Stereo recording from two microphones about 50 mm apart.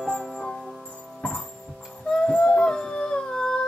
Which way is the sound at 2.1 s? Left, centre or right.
Centre.